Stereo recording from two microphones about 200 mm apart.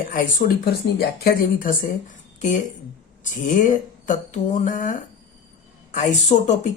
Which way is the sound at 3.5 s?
40° left (ahead or behind).